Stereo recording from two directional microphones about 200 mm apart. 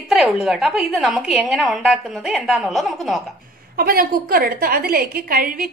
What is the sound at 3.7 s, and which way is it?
A woman's voice, 45° right (ahead or behind).